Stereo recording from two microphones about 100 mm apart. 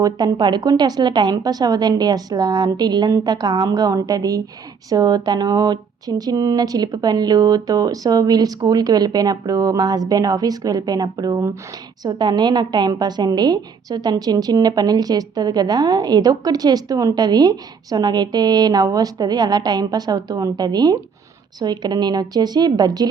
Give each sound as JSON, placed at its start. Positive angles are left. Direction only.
{"t": 0.0, "sound": "a woman's voice", "side_deg": -45}